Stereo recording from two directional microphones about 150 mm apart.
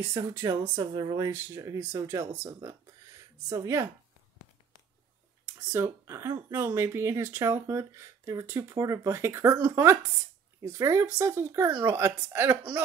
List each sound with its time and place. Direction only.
0.0 s speech: 15° right (ahead or behind)
5.5 s speech: 15° right (ahead or behind)